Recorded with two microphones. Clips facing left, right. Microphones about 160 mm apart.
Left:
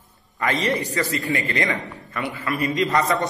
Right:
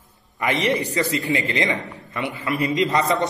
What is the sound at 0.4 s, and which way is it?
A man's voice, 20° right (ahead or behind).